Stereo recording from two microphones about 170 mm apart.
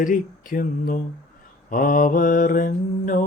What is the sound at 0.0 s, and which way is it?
Mantra, 55° left (ahead or behind).